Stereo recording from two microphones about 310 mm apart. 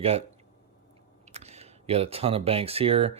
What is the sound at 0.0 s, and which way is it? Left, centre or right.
Speech, centre.